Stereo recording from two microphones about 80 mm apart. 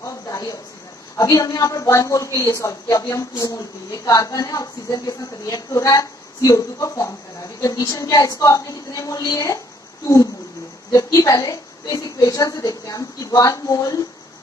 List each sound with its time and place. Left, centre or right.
0.0 s a sound: left
1.1 s a woman's voice: left
10.9 s a woman's voice: left